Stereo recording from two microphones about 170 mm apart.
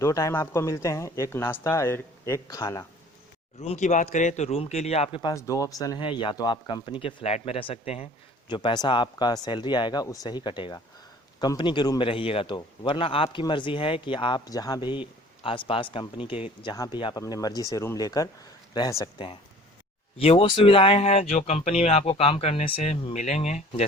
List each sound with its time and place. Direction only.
0.0 s speech: 20° left (ahead or behind)
3.6 s speech: 40° left (ahead or behind)
5.3 s speech: 20° left (ahead or behind)
20.1 s speech: 35° left (ahead or behind)